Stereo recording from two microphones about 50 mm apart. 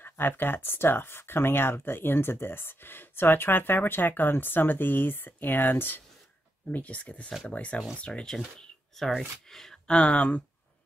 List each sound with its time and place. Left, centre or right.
0.3 s speech: left
6.7 s speech: left
8.0 s speech: centre
8.5 s a sound: centre
9.5 s speech: centre
9.8 s speech: centre